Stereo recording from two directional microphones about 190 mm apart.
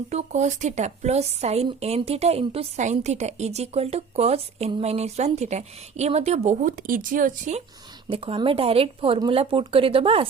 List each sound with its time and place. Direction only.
0.1 s a woman's voice: 35° right (ahead or behind)
8.1 s speech: 30° right (ahead or behind)